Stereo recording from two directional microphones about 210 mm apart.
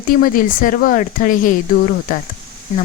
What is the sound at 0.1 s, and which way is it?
Speech, 40° left (ahead or behind).